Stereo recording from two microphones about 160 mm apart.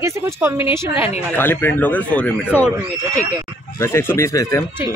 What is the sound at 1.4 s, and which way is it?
Speech, 15° left (ahead or behind).